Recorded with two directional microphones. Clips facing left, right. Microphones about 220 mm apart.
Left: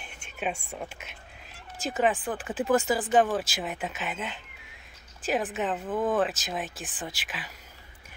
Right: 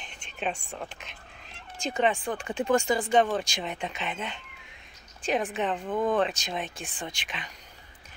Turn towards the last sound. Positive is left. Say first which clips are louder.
# even
turn(degrees=5)  # may be behind; listen again after turning